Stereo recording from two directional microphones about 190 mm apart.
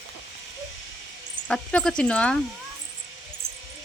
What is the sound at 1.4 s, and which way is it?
Speech, 5° left (ahead or behind).